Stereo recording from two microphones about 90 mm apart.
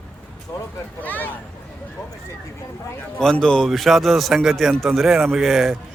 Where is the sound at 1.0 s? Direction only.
20° left (ahead or behind).